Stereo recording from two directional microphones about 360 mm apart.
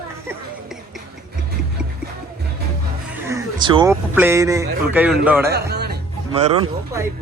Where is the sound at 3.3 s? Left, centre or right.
Centre.